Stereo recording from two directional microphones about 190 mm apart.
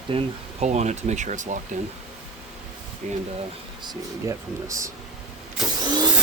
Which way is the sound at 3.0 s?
40° right (ahead or behind).